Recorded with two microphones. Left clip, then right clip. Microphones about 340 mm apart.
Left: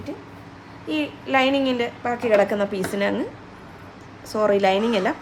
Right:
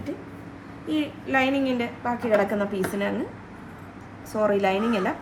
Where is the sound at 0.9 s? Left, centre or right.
Centre.